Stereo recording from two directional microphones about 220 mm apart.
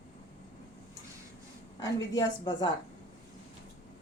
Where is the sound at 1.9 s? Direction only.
20° left (ahead or behind).